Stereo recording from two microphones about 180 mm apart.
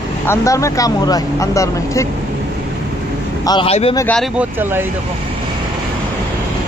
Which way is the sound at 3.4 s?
20° left (ahead or behind).